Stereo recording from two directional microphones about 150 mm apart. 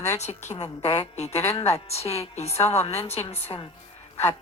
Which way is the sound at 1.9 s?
45° left (ahead or behind).